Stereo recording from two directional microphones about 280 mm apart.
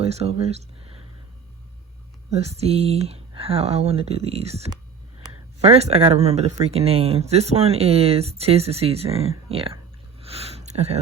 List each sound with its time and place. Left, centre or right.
0.0 s speech: right
2.6 s speech: right
10.2 s a sound: right